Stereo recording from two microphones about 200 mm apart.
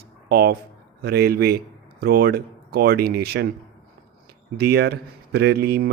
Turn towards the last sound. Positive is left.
turn(degrees=-50)  # may be behind; listen again after turning